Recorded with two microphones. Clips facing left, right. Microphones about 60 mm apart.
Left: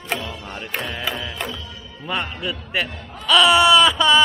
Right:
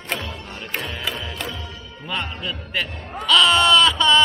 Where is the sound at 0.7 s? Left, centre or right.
Centre.